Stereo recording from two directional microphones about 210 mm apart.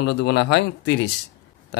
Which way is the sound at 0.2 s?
55° left (ahead or behind).